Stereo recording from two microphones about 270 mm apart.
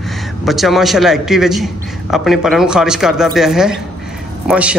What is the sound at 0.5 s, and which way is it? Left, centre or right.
A man's voice, centre.